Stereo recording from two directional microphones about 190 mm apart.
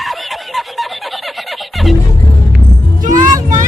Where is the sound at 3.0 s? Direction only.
40° right (ahead or behind).